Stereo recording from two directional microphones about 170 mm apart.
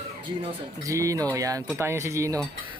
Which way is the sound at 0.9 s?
20° right (ahead or behind).